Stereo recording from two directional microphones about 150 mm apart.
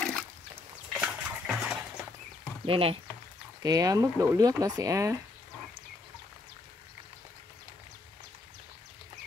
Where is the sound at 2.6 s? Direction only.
35° right (ahead or behind).